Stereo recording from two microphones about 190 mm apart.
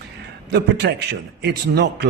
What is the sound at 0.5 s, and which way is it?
A man's voice, 60° right (ahead or behind).